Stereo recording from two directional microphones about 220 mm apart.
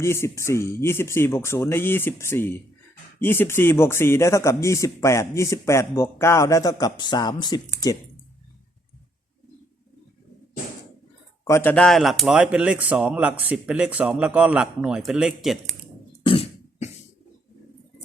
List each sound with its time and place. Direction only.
0.0 s speech: 10° left (ahead or behind)
11.4 s speech: 10° left (ahead or behind)
16.2 s cough: 25° left (ahead or behind)